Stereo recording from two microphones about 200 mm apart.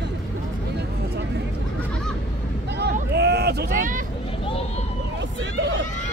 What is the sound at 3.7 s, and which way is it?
Hubbub, 40° right (ahead or behind).